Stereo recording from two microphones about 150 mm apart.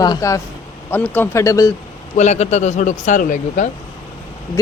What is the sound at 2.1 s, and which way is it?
Speech, 50° left (ahead or behind).